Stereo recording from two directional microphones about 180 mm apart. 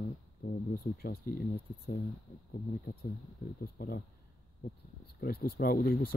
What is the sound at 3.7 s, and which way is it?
Speech, 55° left (ahead or behind).